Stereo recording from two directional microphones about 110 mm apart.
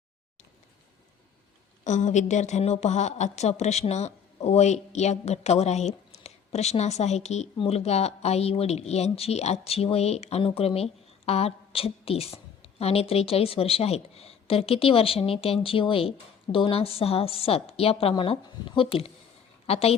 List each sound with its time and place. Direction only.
1.8 s a woman's voice: 90° left
7.6 s a woman's voice: 65° left (ahead or behind)
18.4 s speech: 50° left (ahead or behind)
19.6 s speech: 65° left (ahead or behind)